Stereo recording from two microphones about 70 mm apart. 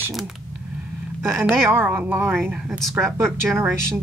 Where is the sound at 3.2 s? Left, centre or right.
Right.